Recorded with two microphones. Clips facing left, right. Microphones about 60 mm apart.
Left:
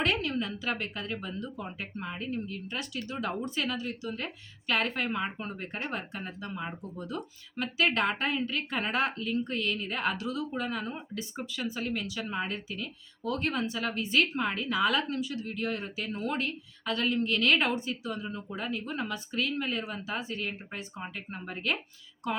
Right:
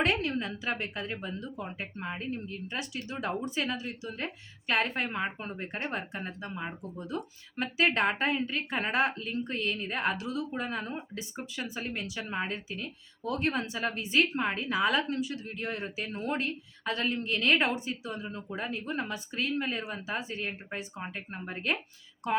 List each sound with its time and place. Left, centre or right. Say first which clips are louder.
0.0 s a woman's voice: right 1 dB; right
18.0 s a woman's voice: left 2 dB; right